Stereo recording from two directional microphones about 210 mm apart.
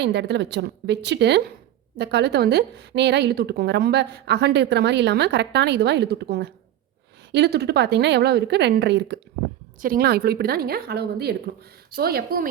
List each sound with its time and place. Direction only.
0.0 s a woman's voice: 55° right (ahead or behind)